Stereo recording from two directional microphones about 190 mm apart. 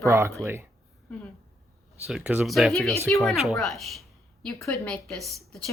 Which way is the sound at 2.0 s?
5° right (ahead or behind).